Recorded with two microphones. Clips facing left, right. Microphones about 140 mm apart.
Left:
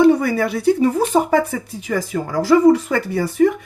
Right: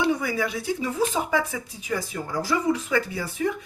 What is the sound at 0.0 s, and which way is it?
Speech, 50° left (ahead or behind).